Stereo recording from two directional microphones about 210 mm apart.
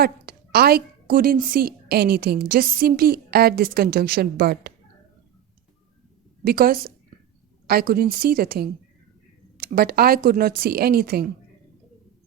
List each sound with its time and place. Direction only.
0.0 s a woman's voice: 45° right (ahead or behind)
6.4 s a woman's voice: 45° right (ahead or behind)